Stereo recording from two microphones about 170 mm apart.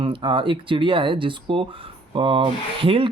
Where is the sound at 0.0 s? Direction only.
30° right (ahead or behind).